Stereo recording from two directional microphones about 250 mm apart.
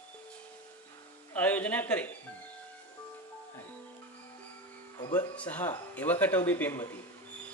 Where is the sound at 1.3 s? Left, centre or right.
Centre.